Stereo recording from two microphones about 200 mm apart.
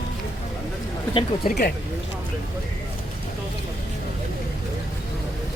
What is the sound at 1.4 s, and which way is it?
Speech, 50° left (ahead or behind).